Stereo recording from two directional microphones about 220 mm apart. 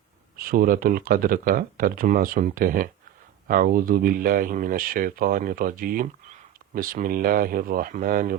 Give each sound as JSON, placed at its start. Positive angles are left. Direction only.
{"t": 0.3, "sound": "speech", "side_deg": -40}